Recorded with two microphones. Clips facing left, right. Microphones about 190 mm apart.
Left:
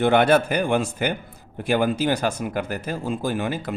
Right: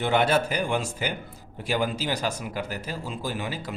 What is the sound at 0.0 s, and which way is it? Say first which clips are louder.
A man's voice: left 5 dB; 55° left (ahead or behind).